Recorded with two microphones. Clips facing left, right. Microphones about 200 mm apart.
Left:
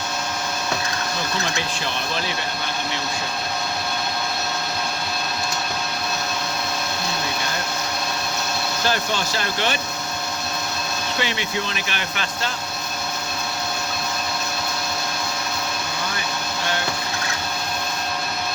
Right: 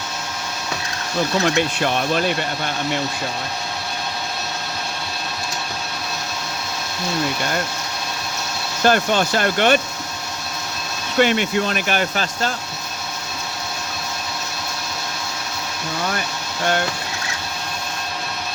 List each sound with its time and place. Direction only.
8.9 s speech: 55° right (ahead or behind)
11.2 s speech: 50° right (ahead or behind)